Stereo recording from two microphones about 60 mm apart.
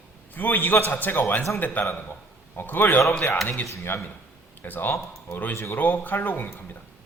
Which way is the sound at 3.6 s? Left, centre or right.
Left.